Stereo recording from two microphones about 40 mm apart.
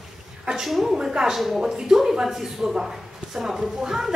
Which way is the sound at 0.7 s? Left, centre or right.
Centre.